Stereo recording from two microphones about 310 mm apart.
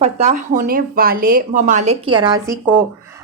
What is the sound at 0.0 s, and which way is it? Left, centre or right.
Speech, right.